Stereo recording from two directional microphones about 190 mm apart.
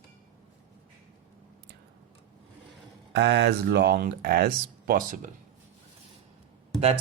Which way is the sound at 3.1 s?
65° right (ahead or behind).